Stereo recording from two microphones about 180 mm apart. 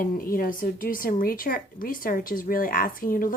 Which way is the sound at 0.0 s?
50° left (ahead or behind).